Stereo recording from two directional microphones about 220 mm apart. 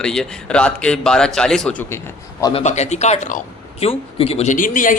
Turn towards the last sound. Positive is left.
turn(degrees=35)  # may be behind; listen again after turning